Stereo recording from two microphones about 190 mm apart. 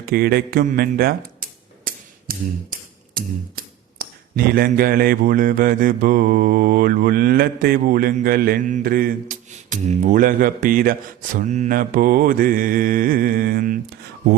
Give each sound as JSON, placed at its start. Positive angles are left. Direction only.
{"t": 0.0, "sound": "a sound", "side_deg": -55}
{"t": 3.2, "sound": "speech", "side_deg": -50}
{"t": 9.6, "sound": "speech", "side_deg": -40}